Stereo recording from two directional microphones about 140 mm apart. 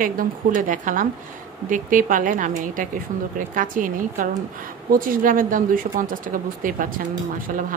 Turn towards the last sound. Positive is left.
turn(degrees=-70)  # may be behind; listen again after turning